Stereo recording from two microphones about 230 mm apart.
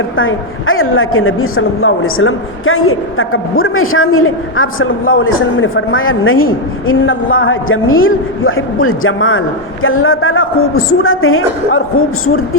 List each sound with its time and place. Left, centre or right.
0.2 s a man's voice: left